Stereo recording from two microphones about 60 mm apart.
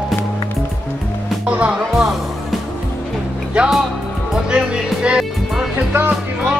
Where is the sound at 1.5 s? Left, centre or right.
Right.